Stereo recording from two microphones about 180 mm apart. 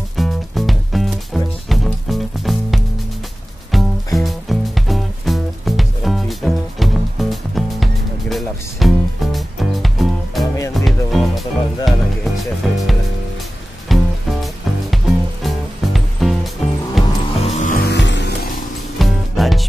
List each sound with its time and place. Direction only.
0.1 s music: centre (ahead or behind)
17.4 s music: 35° left (ahead or behind)
17.8 s music: 75° left (ahead or behind)
18.9 s music: centre (ahead or behind)